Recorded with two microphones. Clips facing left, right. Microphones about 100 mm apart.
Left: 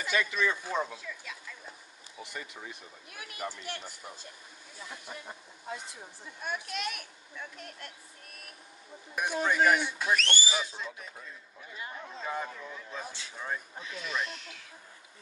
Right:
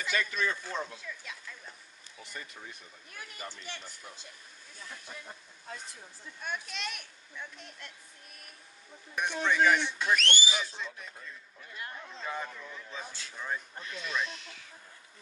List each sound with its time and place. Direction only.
0.0 s speech: 15° left (ahead or behind)
2.1 s speech: 15° left (ahead or behind)
5.7 s speech: 15° left (ahead or behind)
6.4 s speech: 5° left (ahead or behind)
9.1 s speech: 10° left (ahead or behind)
13.1 s speech: 20° left (ahead or behind)
13.5 s speech: centre (ahead or behind)